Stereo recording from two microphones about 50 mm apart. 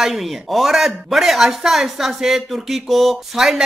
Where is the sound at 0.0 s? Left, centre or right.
Centre.